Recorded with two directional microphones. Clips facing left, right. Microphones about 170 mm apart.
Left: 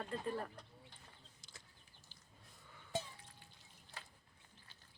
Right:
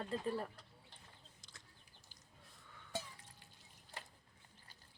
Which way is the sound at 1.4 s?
5° left (ahead or behind).